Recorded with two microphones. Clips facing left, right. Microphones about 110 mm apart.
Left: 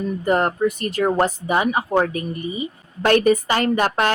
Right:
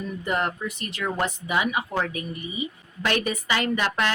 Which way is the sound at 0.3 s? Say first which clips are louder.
Left 8 dB; 40° left (ahead or behind).